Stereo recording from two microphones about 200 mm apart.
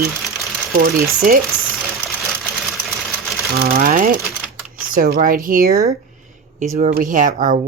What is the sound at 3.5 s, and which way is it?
Speech, 50° right (ahead or behind).